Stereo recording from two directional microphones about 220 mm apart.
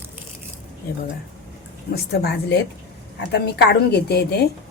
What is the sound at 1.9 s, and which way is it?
Speech, 45° left (ahead or behind).